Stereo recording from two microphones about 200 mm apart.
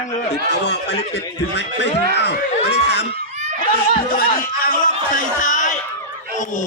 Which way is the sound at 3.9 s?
45° left (ahead or behind).